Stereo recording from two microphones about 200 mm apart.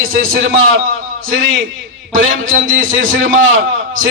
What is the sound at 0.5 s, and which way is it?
Speech, 90° right.